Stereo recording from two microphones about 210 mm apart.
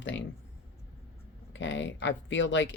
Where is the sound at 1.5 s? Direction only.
60° left (ahead or behind).